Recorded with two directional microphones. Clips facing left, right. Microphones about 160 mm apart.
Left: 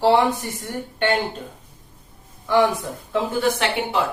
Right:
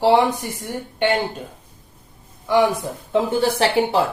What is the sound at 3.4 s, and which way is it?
Speech, 35° right (ahead or behind).